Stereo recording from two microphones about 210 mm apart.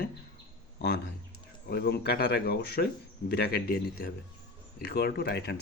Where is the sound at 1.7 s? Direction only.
50° left (ahead or behind).